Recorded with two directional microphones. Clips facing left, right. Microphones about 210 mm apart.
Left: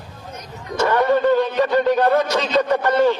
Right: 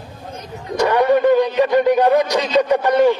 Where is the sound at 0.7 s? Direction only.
15° right (ahead or behind).